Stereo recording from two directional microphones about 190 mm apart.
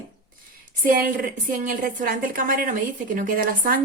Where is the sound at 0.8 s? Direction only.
50° right (ahead or behind).